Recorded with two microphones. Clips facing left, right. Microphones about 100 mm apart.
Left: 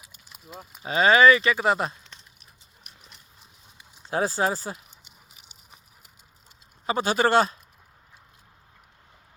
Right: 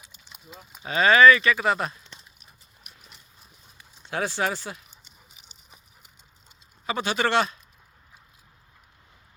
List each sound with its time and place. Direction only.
0.3 s livestock: centre (ahead or behind)
0.9 s speech: 30° left (ahead or behind)
2.1 s a sound: centre (ahead or behind)
4.1 s speech: 35° left (ahead or behind)
6.8 s speech: 35° left (ahead or behind)